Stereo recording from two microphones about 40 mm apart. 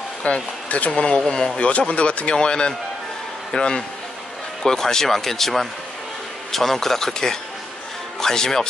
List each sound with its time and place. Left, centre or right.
0.2 s speech: left
1.1 s speech: centre
1.6 s a man's voice: left; by 8.6 s centre